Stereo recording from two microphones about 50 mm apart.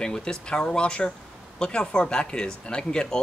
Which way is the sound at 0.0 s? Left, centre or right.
Centre.